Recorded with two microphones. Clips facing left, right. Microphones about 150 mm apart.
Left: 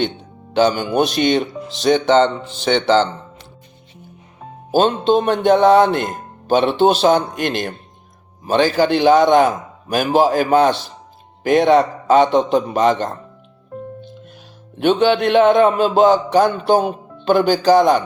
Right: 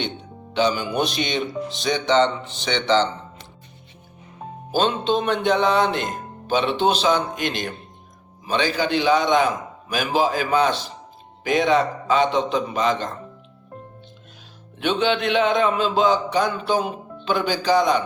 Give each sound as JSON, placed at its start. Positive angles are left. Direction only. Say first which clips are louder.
{"t": 0.5, "sound": "a man's voice", "louder": "left 6 dB", "side_deg": 45}
{"t": 4.7, "sound": "a man's voice", "louder": "left 6 dB", "side_deg": 50}
{"t": 14.8, "sound": "a man's voice", "louder": "left 7 dB", "side_deg": 50}